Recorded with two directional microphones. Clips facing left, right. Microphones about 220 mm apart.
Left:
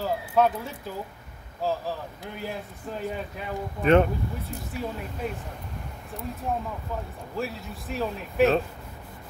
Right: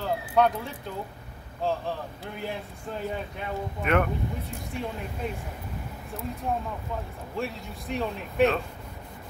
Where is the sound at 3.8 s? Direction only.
30° left (ahead or behind).